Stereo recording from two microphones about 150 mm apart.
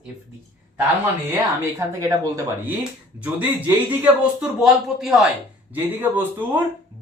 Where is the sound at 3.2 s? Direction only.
10° right (ahead or behind).